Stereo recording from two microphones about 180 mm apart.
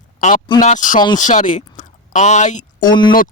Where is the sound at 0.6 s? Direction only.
45° left (ahead or behind).